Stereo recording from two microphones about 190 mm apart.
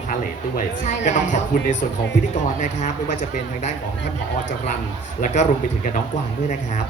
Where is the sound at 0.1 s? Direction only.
40° left (ahead or behind).